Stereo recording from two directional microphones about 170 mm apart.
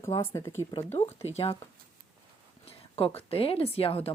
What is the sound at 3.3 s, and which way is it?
Speech, 35° left (ahead or behind).